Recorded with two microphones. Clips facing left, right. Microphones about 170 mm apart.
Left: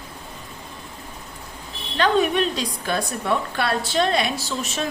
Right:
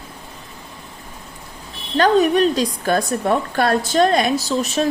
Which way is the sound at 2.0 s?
40° right (ahead or behind).